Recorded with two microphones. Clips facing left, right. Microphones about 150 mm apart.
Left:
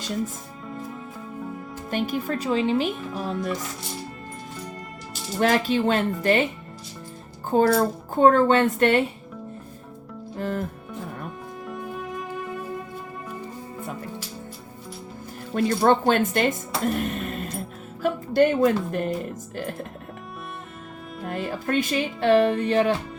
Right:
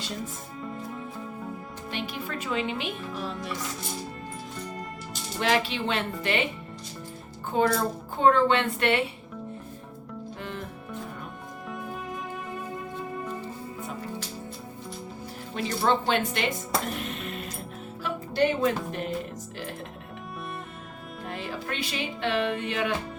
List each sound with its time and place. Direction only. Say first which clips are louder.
1.9 s speech: left 8 dB; 45° left (ahead or behind)
5.4 s speech: left 5 dB; 45° left (ahead or behind)
7.7 s speech: left 6 dB; 45° left (ahead or behind)
10.3 s music: left 11 dB; 45° left (ahead or behind)
15.5 s speech: left 6 dB; 50° left (ahead or behind)
21.2 s speech: left 7 dB; 45° left (ahead or behind)